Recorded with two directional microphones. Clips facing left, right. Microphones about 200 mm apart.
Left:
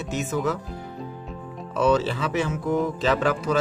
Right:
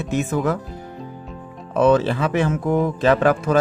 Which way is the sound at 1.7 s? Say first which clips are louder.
Right 5 dB; 55° right (ahead or behind).